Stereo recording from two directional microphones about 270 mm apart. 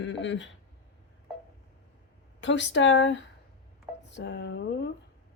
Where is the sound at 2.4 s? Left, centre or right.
Left.